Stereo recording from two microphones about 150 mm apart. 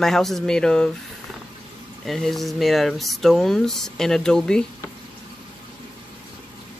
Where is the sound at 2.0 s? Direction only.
Centre (ahead or behind).